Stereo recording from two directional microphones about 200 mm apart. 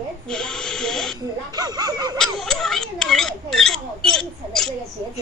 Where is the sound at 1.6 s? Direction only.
20° right (ahead or behind).